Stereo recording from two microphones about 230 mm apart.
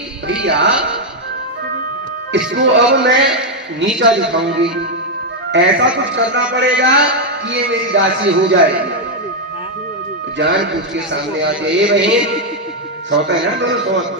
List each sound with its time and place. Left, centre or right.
0.3 s a man's voice: right
2.3 s a man's voice: right
10.3 s a man's voice: right
13.2 s a man's voice: right